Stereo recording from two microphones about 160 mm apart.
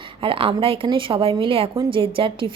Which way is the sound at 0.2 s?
35° right (ahead or behind).